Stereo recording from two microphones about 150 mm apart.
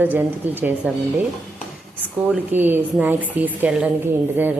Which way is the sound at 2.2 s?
10° right (ahead or behind).